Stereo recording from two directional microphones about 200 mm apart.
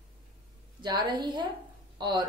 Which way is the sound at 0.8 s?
20° right (ahead or behind).